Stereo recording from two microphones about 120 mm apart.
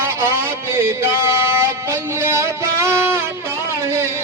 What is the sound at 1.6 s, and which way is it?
Music, 20° right (ahead or behind).